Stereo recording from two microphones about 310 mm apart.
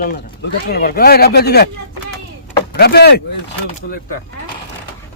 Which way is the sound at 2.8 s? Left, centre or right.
Left.